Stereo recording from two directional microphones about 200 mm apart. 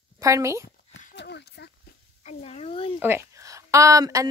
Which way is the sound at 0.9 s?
60° left (ahead or behind).